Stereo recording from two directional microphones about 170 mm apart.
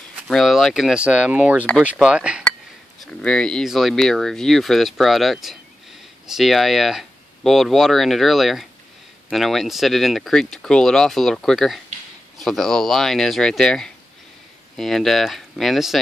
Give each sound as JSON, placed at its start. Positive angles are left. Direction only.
{"t": 0.3, "sound": "speech", "side_deg": 0}